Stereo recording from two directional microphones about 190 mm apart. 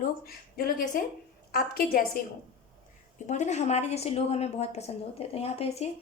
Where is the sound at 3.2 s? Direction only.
40° left (ahead or behind).